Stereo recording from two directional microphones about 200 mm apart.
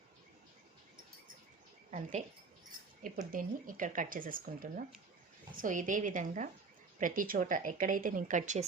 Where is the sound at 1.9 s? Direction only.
40° right (ahead or behind).